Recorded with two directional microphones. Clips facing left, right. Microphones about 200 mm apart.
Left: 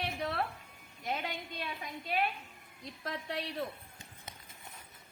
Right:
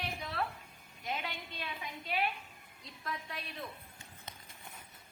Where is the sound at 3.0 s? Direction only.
75° left (ahead or behind).